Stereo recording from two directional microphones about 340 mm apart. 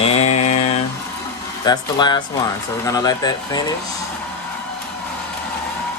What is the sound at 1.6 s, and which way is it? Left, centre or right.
Speech, centre.